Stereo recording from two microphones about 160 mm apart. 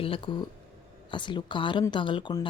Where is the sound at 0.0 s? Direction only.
35° left (ahead or behind).